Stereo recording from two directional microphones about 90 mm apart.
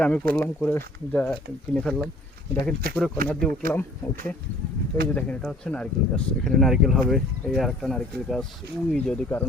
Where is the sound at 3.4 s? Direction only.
15° left (ahead or behind).